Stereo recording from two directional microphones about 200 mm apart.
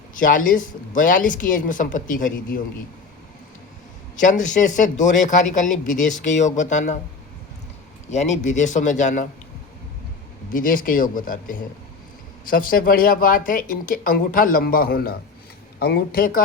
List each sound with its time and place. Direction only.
0.1 s speech: 40° left (ahead or behind)
4.2 s speech: 40° left (ahead or behind)
8.1 s speech: 35° left (ahead or behind)
10.5 s speech: 45° left (ahead or behind)